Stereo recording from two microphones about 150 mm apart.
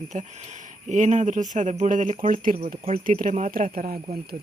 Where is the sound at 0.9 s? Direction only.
55° right (ahead or behind).